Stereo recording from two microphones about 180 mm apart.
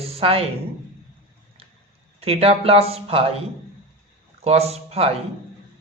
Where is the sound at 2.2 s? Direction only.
35° right (ahead or behind).